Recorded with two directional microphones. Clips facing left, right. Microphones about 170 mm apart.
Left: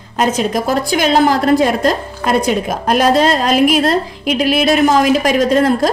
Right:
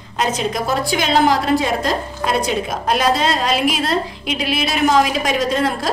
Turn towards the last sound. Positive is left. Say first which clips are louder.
# left 7 dB
turn(degrees=50)  # may be behind; listen again after turning